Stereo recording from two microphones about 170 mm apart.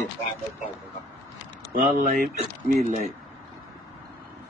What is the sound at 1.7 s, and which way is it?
A man's voice, 45° right (ahead or behind).